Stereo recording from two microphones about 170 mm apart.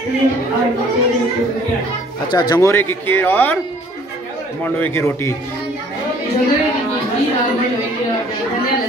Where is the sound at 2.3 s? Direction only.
25° left (ahead or behind).